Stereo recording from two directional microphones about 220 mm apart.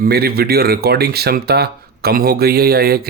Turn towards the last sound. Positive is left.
turn(degrees=-45)  # may be behind; listen again after turning